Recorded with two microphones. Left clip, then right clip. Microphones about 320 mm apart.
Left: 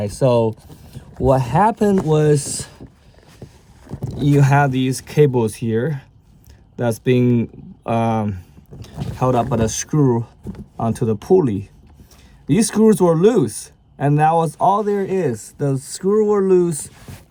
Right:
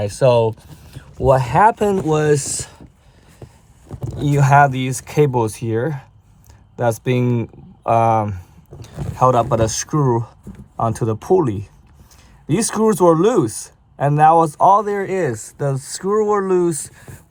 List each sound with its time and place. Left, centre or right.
0.1 s speech: centre
1.2 s speech: right
2.1 s speech: right
4.1 s speech: centre